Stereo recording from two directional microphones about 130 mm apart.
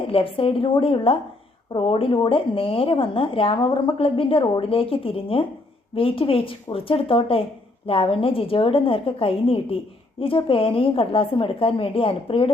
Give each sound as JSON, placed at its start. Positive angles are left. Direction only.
{"t": 0.1, "sound": "speech", "side_deg": 45}